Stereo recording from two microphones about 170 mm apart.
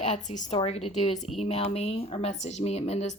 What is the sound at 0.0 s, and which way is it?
A woman's voice, 45° left (ahead or behind).